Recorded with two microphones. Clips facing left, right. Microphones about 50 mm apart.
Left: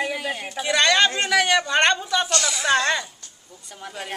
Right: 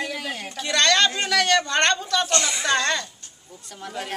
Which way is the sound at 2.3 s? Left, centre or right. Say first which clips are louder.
Even; right.